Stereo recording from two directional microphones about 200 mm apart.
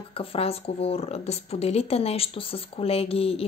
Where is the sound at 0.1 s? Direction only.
30° left (ahead or behind).